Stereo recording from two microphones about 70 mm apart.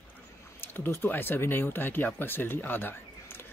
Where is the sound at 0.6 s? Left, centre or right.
Left.